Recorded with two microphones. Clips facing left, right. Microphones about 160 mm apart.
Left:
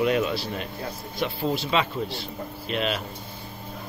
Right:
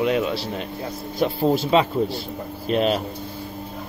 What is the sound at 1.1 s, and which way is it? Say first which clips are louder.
Speech: right 7 dB; 45° right (ahead or behind).